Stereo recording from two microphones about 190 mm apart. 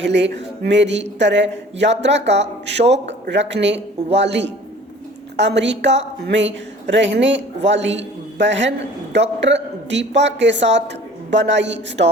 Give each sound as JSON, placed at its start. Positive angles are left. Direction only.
{"t": 0.0, "sound": "a woman's voice", "side_deg": -70}